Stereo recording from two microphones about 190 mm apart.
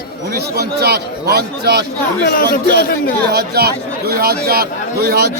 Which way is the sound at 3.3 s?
55° right (ahead or behind).